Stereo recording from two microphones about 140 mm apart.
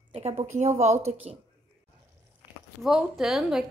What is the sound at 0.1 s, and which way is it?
A woman's voice, 50° right (ahead or behind).